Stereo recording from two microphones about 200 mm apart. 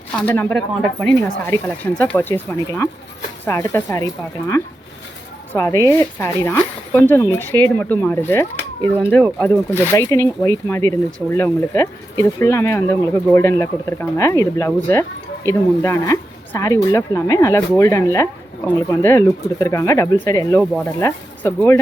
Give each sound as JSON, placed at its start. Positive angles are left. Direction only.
{"t": 0.2, "sound": "speech", "side_deg": 10}